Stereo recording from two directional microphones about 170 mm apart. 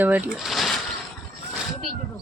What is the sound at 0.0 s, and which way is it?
Speech, 10° right (ahead or behind).